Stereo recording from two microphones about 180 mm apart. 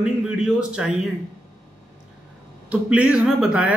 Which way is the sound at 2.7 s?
5° right (ahead or behind).